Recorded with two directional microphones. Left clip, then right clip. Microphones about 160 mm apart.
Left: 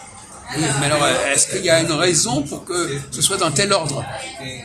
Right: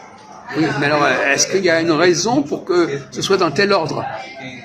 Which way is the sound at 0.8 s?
10° right (ahead or behind).